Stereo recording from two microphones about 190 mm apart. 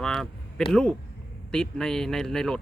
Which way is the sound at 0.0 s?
5° left (ahead or behind).